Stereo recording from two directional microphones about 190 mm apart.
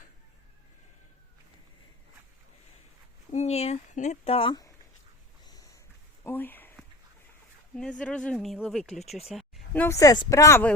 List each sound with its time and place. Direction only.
3.3 s speech: 35° left (ahead or behind)
5.5 s a sound: 20° left (ahead or behind)
7.8 s speech: 5° left (ahead or behind)